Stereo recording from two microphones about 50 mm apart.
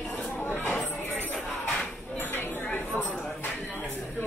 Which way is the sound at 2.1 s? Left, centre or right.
Left.